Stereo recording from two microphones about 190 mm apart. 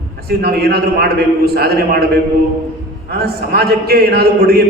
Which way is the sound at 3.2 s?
55° right (ahead or behind).